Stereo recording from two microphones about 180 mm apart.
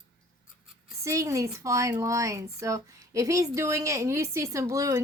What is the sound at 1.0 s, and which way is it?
Speech, 15° right (ahead or behind).